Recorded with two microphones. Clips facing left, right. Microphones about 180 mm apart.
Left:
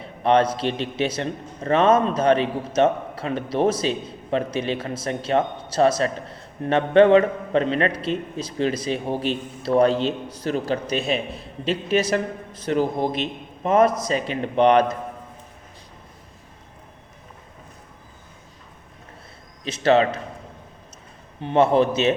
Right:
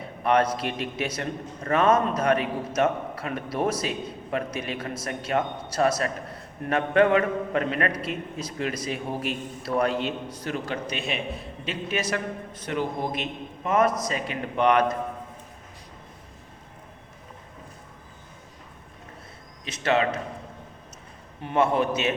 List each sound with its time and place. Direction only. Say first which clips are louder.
0.2 s a man's voice: left 4 dB; 25° left (ahead or behind)
19.6 s a man's voice: left 6 dB; 35° left (ahead or behind)
21.4 s a man's voice: left 5 dB; 30° left (ahead or behind)